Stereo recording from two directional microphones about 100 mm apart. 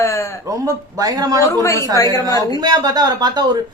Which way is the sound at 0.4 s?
35° right (ahead or behind).